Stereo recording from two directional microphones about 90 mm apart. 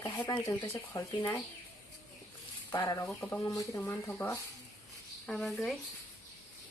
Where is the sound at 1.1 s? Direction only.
55° left (ahead or behind).